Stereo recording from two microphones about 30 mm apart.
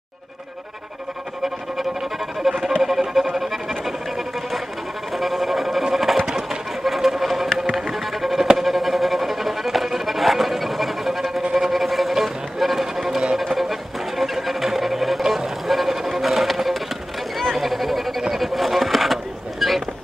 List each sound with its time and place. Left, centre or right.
1.4 s music: centre
5.1 s music: centre
6.2 s a sound: right
6.8 s sewing machine: centre
7.9 s music: centre
12.5 s run: centre
13.4 s music: centre
15.2 s vehicle: centre
15.6 s music: centre
17.4 s a sound: centre
19.6 s vehicle: centre